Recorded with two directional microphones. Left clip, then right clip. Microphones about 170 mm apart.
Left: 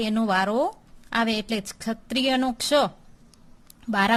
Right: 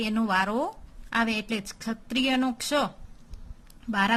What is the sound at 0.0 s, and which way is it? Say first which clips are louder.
A woman's voice: left 2 dB; 30° left (ahead or behind).